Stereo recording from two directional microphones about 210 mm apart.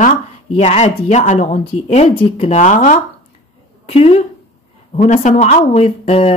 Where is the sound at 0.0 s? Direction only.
30° left (ahead or behind).